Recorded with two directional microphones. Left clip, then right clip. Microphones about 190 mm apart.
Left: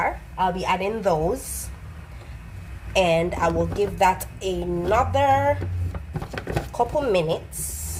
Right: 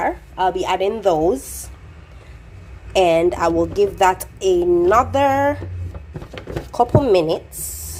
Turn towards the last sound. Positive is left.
turn(degrees=-40)  # may be behind; listen again after turning